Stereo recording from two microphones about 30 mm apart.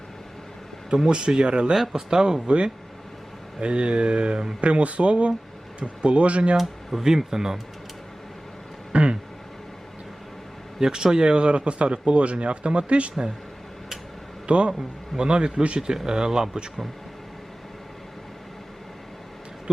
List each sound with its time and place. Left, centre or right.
1.0 s speech: right
1.7 s speech: centre
3.6 s speech: right
4.6 s speech: right
7.0 s speech: centre
8.9 s a sound: right
10.8 s speech: centre
11.0 s speech: right
14.4 s speech: right
14.7 s speech: centre
15.2 s speech: right